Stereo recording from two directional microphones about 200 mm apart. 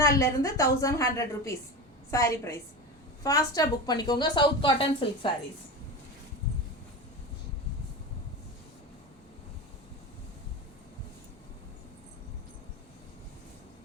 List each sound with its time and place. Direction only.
0.2 s a woman's voice: 15° left (ahead or behind)